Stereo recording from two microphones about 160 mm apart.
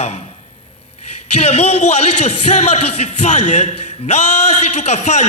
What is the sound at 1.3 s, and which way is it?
A man's voice, 40° left (ahead or behind).